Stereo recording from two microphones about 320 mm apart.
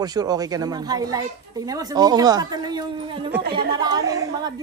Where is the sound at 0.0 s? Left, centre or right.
Centre.